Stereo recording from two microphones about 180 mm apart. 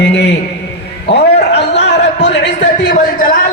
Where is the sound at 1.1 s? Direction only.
70° left (ahead or behind).